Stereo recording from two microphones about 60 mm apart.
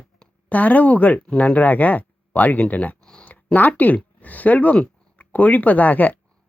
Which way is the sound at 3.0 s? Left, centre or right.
Centre.